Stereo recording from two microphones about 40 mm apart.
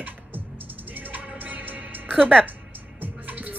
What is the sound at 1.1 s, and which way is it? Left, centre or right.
Music, right.